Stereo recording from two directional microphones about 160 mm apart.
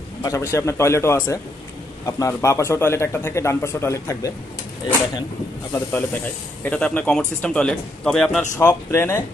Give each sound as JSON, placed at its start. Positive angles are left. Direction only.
{"t": 0.2, "sound": "speech", "side_deg": 20}
{"t": 5.7, "sound": "speech", "side_deg": 15}
{"t": 8.5, "sound": "speech", "side_deg": 15}